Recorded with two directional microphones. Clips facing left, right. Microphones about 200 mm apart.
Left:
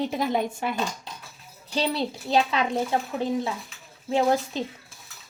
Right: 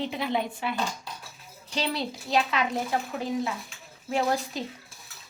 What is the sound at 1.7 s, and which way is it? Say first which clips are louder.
Speech: left 4 dB; 30° left (ahead or behind).